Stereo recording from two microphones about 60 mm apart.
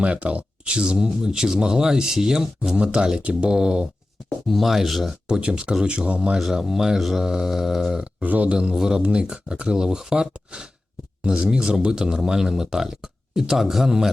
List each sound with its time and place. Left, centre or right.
0.0 s speech: right
4.4 s speech: centre
5.3 s speech: centre
6.4 s speech: centre
8.2 s speech: right
8.5 s speech: centre